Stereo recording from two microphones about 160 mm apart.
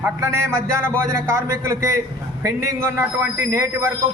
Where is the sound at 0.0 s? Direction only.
15° right (ahead or behind).